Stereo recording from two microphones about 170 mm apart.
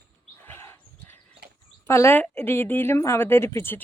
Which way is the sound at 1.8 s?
15° left (ahead or behind).